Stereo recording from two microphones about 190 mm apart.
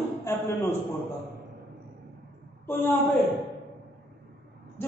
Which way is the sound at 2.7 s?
10° left (ahead or behind).